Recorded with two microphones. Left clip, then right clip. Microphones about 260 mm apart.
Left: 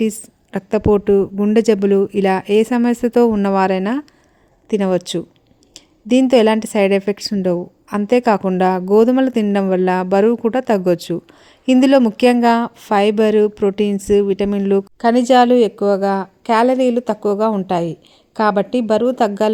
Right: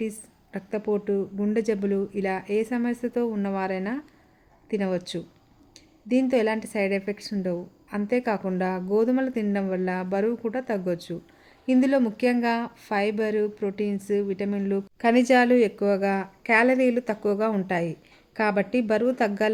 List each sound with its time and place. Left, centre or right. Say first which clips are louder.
0.1 s a woman's voice: left 12 dB; left